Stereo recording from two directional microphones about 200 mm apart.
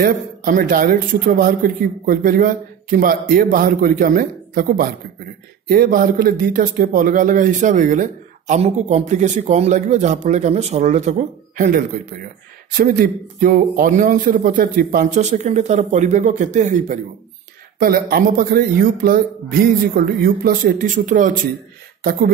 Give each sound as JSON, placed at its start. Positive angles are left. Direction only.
{"t": 0.0, "sound": "speech", "side_deg": -45}